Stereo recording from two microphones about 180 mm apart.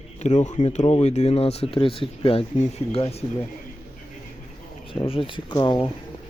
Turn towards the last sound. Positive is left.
turn(degrees=25)  # may be behind; listen again after turning